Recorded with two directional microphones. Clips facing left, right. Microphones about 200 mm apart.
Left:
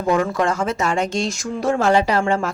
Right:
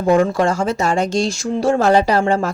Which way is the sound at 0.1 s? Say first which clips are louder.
Right 4 dB; 30° right (ahead or behind).